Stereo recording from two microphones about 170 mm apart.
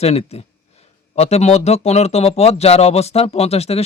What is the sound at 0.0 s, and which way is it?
Speech, 40° left (ahead or behind).